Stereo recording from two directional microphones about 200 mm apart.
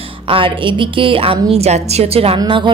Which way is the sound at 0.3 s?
25° right (ahead or behind).